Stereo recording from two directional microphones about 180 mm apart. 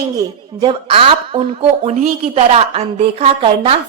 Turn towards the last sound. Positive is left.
turn(degrees=-35)  # may be behind; listen again after turning